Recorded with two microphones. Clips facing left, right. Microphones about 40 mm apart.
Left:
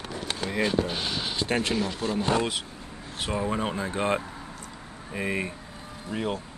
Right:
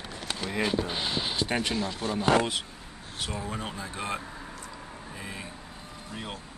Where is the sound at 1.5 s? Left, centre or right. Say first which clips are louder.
Left 3 dB; centre.